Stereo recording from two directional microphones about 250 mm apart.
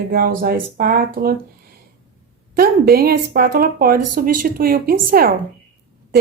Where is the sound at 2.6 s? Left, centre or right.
Right.